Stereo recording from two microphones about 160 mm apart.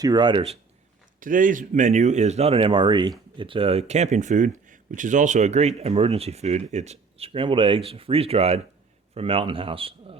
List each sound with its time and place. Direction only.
0.0 s a man's voice: 25° right (ahead or behind)
1.2 s a man's voice: 55° right (ahead or behind); by 10.2 s 35° right (ahead or behind)